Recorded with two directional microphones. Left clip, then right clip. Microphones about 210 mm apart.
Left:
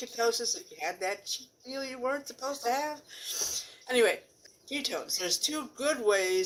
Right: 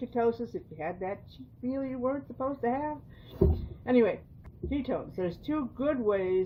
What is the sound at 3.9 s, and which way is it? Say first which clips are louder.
Speech: even; 5° left (ahead or behind).